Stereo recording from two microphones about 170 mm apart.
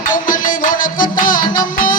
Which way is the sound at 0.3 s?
55° left (ahead or behind).